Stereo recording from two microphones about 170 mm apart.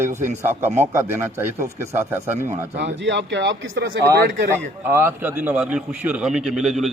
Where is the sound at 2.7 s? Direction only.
90° right.